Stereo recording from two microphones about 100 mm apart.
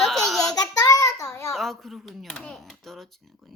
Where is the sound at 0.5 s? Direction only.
40° left (ahead or behind).